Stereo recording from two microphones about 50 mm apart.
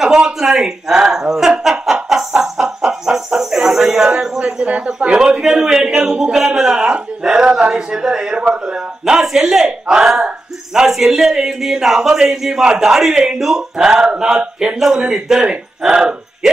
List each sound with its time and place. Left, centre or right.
0.0 s a man's voice: centre